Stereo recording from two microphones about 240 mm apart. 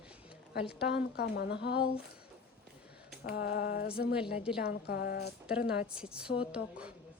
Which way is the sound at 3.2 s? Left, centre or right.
Left.